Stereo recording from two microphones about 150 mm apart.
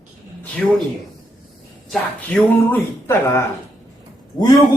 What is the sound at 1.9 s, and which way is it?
Speech, 10° left (ahead or behind).